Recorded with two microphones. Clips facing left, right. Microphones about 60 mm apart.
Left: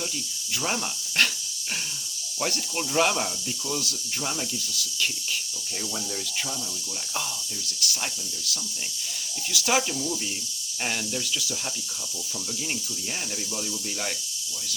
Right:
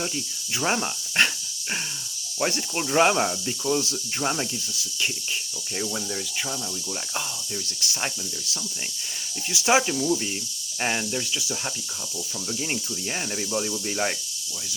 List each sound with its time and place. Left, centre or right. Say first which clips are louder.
0.6 s speech: right 5 dB; right
2.4 s speech: right 3 dB; right
7.8 s speech: right 1 dB; right
13.5 s speech: right 6 dB; right